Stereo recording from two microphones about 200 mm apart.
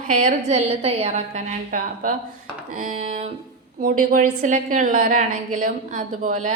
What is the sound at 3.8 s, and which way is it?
A woman's voice, 45° right (ahead or behind).